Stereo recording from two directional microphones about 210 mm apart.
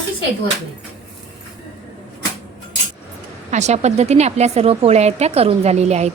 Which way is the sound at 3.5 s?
30° right (ahead or behind).